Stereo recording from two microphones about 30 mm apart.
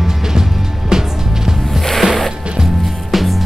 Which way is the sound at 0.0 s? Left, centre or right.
Centre.